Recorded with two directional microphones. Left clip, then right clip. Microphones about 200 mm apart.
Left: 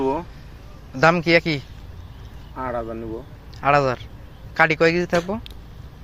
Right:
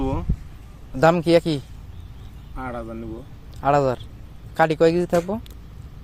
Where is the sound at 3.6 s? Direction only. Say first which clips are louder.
Left 1 dB; 20° right (ahead or behind).